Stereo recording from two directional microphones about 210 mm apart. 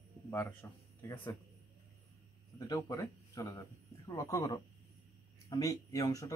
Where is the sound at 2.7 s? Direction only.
15° left (ahead or behind).